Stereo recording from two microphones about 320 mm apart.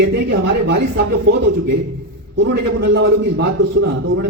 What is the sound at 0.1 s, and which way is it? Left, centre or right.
Speech, right.